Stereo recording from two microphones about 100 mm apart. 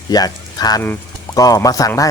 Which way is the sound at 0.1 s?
40° left (ahead or behind).